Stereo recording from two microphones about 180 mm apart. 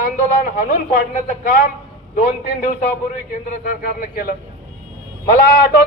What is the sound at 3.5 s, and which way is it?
Speech, 50° left (ahead or behind).